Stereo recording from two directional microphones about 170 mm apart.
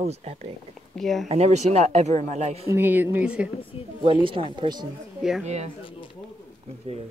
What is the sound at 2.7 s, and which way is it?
Speech, 10° right (ahead or behind).